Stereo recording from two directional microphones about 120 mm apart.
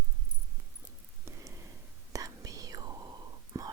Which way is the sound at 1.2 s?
25° right (ahead or behind).